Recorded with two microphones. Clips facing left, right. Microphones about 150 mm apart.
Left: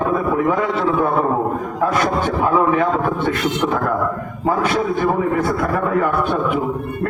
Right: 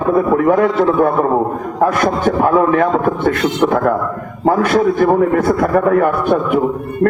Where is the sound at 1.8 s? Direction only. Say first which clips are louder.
Right 5 dB; 60° right (ahead or behind).